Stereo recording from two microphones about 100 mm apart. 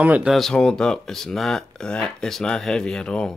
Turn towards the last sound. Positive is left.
turn(degrees=10)  # may be behind; listen again after turning